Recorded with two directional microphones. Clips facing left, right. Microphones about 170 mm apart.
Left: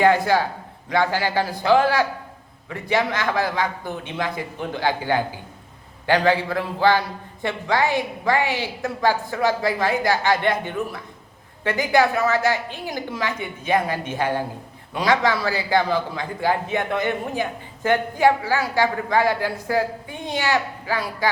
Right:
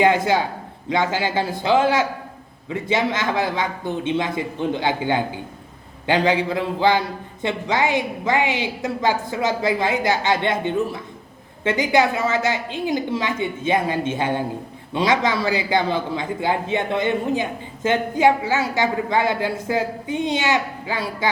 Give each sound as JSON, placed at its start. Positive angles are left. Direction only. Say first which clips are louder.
{"t": 0.0, "sound": "a man's voice", "louder": "even", "side_deg": -20}